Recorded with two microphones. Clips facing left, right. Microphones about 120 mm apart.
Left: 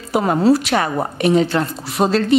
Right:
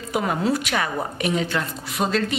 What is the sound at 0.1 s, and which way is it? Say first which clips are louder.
A woman's voice: left 8 dB; 35° left (ahead or behind).